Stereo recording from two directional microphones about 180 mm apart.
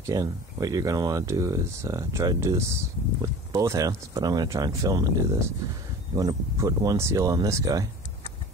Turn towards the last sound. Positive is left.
turn(degrees=-20)  # may be behind; listen again after turning